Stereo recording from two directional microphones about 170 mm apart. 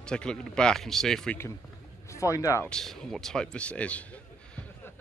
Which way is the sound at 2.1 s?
15° left (ahead or behind).